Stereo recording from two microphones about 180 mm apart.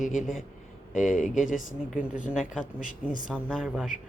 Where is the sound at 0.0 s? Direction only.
45° left (ahead or behind).